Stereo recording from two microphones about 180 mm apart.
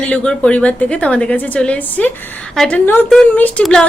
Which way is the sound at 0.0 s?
5° left (ahead or behind).